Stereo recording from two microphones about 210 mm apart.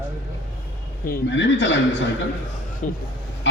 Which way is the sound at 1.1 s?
60° left (ahead or behind).